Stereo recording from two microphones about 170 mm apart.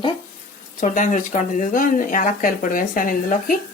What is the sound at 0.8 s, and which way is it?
Speech, 45° left (ahead or behind).